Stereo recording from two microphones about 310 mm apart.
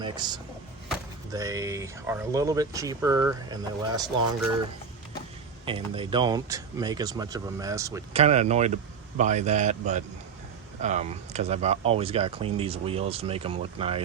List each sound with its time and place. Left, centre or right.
0.0 s speech: centre
5.6 s speech: centre
8.2 s speech: right